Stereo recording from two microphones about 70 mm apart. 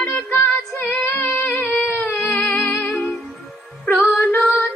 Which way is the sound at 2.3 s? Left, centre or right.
Left.